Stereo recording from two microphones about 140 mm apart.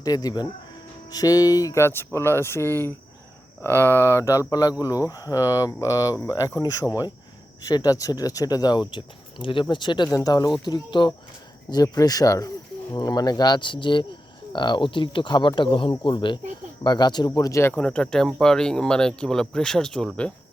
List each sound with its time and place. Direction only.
0.0 s speech: 25° left (ahead or behind)
17.7 s speech: 5° left (ahead or behind)